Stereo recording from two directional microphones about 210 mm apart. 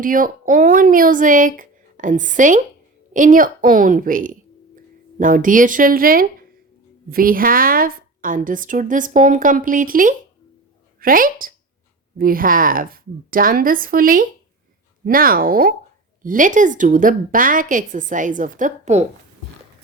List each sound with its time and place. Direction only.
0.0 s a woman's voice: 40° right (ahead or behind)